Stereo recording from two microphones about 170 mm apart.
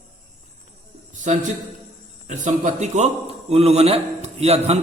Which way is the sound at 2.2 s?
45° right (ahead or behind).